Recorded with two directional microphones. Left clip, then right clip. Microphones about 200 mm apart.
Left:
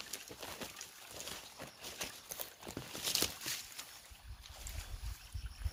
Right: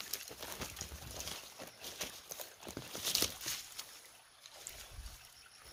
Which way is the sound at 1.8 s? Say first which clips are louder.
Even; 5° right (ahead or behind).